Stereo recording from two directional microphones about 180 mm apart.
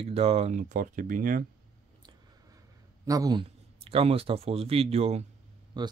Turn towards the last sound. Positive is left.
turn(degrees=-25)  # may be behind; listen again after turning